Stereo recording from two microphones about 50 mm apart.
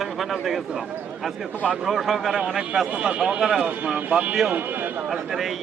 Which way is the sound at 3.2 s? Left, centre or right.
Centre.